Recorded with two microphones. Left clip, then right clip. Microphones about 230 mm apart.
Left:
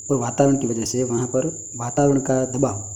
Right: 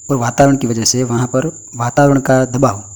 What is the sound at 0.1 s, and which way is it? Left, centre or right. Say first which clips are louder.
A man's voice: right 7 dB; right.